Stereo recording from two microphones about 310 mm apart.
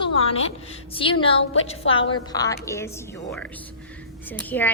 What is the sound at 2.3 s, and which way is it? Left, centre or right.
Speech, centre.